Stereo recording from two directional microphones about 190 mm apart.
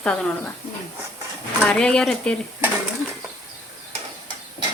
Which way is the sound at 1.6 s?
5° left (ahead or behind).